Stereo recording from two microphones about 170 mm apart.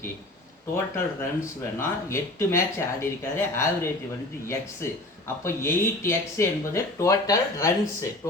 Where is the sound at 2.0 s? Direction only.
15° left (ahead or behind).